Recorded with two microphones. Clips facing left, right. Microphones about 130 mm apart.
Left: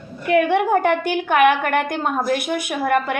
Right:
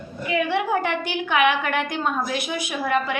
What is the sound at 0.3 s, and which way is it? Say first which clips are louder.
A woman's voice: left 6 dB; 55° left (ahead or behind).